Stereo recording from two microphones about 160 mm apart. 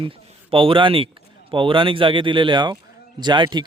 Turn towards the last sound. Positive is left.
turn(degrees=-30)  # may be behind; listen again after turning